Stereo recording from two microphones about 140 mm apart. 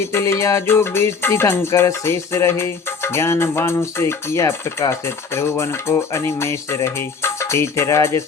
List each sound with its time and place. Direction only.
0.0 s music: 20° left (ahead or behind)